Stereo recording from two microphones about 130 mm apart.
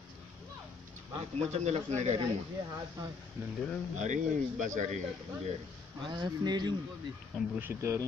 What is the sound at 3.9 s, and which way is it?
Speech, 70° right (ahead or behind).